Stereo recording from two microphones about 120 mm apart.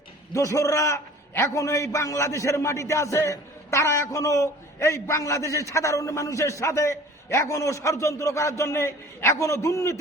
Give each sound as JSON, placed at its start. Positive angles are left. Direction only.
{"t": 0.3, "sound": "a man's voice", "side_deg": 25}